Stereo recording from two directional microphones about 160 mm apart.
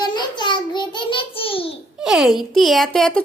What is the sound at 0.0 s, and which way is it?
Child singing, 25° left (ahead or behind).